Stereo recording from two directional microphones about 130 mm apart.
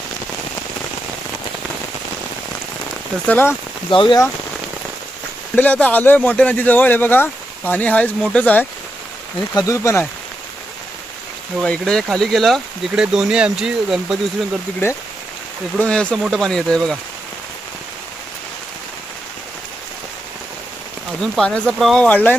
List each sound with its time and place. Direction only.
3.2 s speech: 15° left (ahead or behind)
3.8 s speech: 40° left (ahead or behind)
5.5 s speech: 10° left (ahead or behind)
9.6 s speech: 25° left (ahead or behind)
11.6 s speech: 5° left (ahead or behind)
15.8 s speech: 10° left (ahead or behind)
21.2 s speech: 5° left (ahead or behind)